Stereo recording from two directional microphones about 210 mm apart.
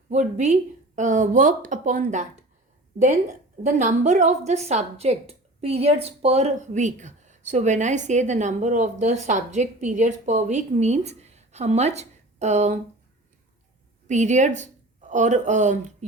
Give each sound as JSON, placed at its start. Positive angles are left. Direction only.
{"t": 0.1, "sound": "a woman's voice", "side_deg": -35}
{"t": 3.6, "sound": "a woman's voice", "side_deg": -35}
{"t": 14.1, "sound": "a woman's voice", "side_deg": -35}